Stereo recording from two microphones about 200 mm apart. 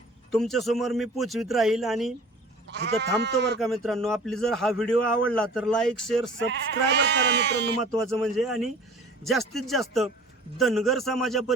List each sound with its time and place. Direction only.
0.3 s a man's voice: centre (ahead or behind)
2.7 s speech: 60° right (ahead or behind)
3.6 s a man's voice: centre (ahead or behind)
6.3 s speech: 60° right (ahead or behind)
7.9 s a man's voice: centre (ahead or behind)